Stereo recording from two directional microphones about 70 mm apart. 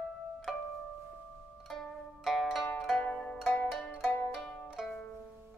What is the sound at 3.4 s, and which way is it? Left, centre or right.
Zither, left.